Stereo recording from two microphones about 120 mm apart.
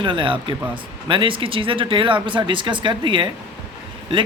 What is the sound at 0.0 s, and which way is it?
Speech, 45° right (ahead or behind).